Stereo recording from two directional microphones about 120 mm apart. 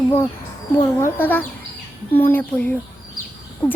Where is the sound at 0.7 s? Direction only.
15° left (ahead or behind).